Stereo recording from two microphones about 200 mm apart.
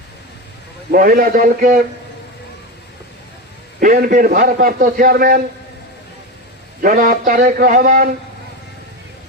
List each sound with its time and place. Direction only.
0.9 s a man's voice: 45° right (ahead or behind)
3.8 s a man's voice: 45° right (ahead or behind)
6.8 s a man's voice: 45° right (ahead or behind)